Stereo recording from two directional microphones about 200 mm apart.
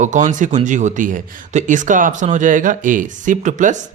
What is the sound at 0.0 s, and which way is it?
Speech, 40° right (ahead or behind).